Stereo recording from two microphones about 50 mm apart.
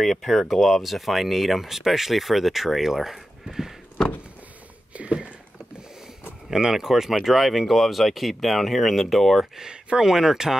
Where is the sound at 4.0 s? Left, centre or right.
Centre.